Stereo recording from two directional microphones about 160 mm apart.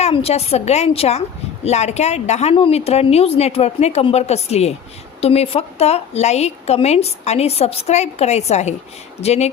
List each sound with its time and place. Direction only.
0.0 s a woman's voice: 40° left (ahead or behind)